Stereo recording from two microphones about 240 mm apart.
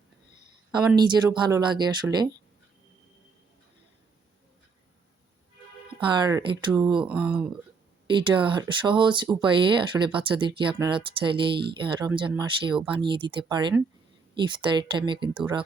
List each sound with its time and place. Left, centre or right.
0.7 s speech: centre
6.1 s speech: centre
7.0 s speech: centre
8.0 s speech: centre